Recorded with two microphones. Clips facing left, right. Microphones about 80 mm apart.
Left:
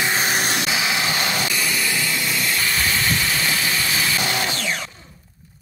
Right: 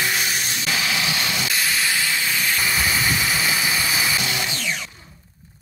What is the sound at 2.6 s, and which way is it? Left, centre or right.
Vehicle, centre.